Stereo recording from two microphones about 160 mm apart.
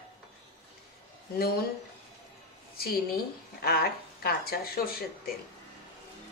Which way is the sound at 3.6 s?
75° left (ahead or behind).